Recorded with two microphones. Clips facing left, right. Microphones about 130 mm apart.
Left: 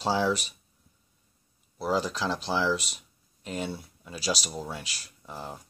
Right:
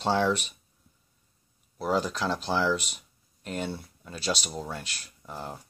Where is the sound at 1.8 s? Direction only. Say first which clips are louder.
Right 1 dB; centre (ahead or behind).